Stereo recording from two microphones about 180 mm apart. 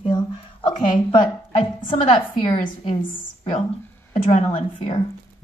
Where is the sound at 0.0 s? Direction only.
30° left (ahead or behind).